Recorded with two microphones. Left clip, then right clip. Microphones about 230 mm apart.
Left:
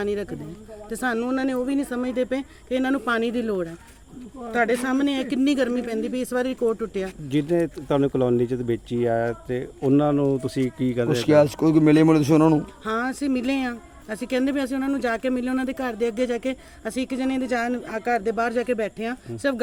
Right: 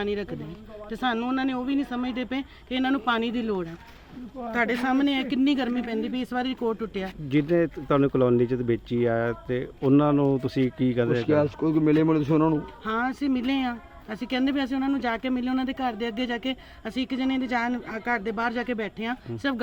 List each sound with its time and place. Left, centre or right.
0.0 s speech: centre
11.1 s a man's voice: left
12.8 s speech: centre